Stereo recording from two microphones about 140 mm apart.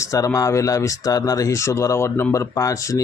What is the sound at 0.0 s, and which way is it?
Speech, 20° left (ahead or behind).